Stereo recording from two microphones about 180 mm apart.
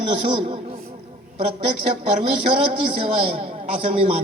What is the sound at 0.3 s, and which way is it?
Speech, 35° right (ahead or behind).